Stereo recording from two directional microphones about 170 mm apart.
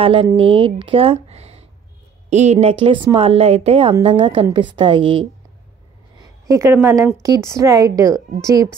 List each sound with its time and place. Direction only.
0.0 s a woman's voice: 30° right (ahead or behind)
6.1 s a sound: 20° right (ahead or behind)
7.2 s a woman's voice: 20° right (ahead or behind)